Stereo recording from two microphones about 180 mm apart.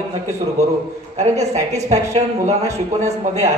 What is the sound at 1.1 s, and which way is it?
Speech, 40° right (ahead or behind).